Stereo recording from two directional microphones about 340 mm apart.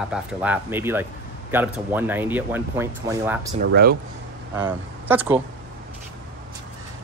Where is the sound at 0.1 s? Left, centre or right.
Centre.